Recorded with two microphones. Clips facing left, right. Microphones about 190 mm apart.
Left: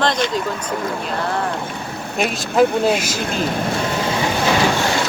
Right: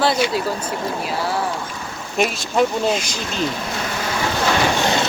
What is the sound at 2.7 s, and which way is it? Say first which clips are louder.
Speech: left 3 dB; 60° left (ahead or behind).